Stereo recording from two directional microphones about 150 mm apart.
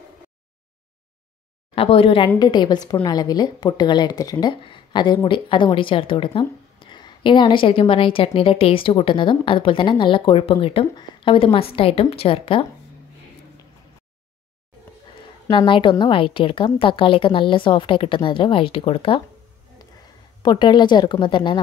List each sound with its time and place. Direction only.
1.8 s speech: 40° left (ahead or behind)
15.5 s speech: 35° left (ahead or behind)
20.4 s speech: 30° left (ahead or behind)